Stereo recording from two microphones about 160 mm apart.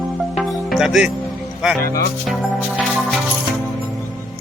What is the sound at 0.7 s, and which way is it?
Speech, centre (ahead or behind).